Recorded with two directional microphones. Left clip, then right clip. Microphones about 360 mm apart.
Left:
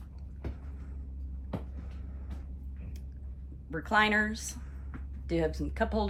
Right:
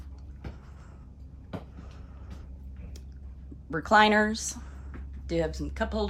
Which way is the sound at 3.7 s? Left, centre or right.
Centre.